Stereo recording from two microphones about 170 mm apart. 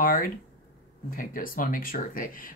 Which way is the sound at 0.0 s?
55° left (ahead or behind).